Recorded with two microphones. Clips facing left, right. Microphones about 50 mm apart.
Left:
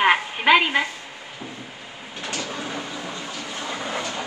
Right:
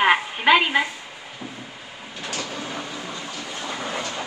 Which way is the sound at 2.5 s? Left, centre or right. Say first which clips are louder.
Left 1 dB; centre.